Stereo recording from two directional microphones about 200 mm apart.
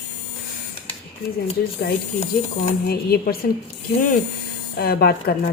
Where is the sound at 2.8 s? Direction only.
50° left (ahead or behind).